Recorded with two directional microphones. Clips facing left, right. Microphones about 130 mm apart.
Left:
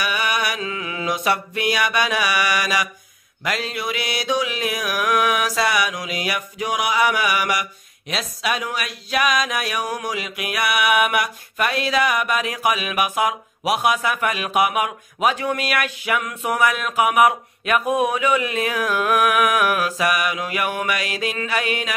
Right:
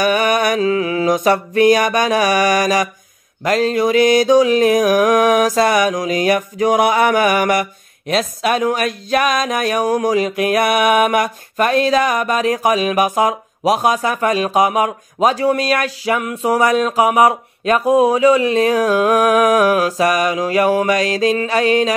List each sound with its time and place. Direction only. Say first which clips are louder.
0.0 s mantra: right 9 dB; 45° right (ahead or behind)
8.1 s speech: right 8 dB; 50° right (ahead or behind)